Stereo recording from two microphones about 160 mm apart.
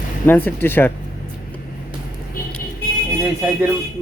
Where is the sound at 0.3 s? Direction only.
10° left (ahead or behind).